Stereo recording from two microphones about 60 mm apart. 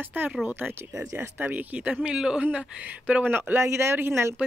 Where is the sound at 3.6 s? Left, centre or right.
Right.